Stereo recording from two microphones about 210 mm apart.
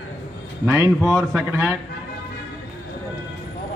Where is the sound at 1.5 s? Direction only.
10° right (ahead or behind).